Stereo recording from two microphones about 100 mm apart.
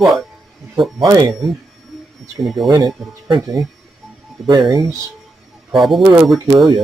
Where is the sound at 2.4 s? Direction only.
Centre (ahead or behind).